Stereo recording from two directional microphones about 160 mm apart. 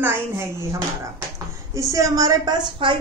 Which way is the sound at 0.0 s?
15° right (ahead or behind).